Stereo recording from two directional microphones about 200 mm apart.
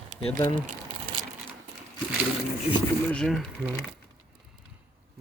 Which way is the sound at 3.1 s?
Centre (ahead or behind).